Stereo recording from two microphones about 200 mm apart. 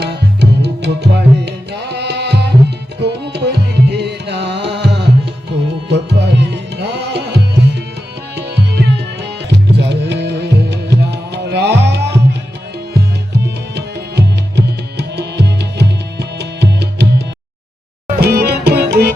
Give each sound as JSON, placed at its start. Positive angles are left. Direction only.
{"t": 0.0, "sound": "music", "side_deg": -55}
{"t": 5.9, "sound": "tabla", "side_deg": -60}
{"t": 9.5, "sound": "music", "side_deg": -60}
{"t": 13.4, "sound": "music", "side_deg": -55}